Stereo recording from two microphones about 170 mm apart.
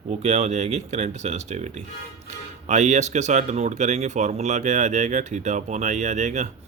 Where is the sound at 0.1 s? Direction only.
40° right (ahead or behind).